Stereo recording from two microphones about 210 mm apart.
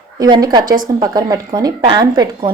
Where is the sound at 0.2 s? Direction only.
20° right (ahead or behind).